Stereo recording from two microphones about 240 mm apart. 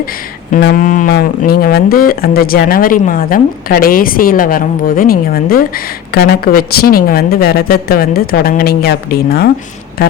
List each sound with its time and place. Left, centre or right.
0.5 s speech: left